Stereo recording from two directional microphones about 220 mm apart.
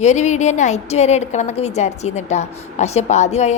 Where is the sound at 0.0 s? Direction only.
30° left (ahead or behind).